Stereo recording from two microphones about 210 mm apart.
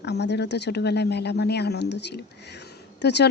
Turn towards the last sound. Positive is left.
turn(degrees=55)  # may be behind; listen again after turning